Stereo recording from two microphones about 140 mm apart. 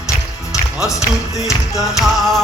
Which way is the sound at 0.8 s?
20° left (ahead or behind).